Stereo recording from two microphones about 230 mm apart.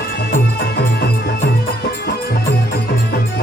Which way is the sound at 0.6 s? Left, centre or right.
Left.